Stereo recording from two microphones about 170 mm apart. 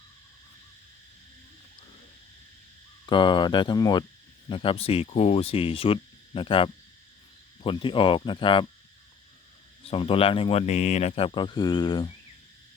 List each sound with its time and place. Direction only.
3.1 s speech: 25° left (ahead or behind)
9.9 s speech: 35° left (ahead or behind)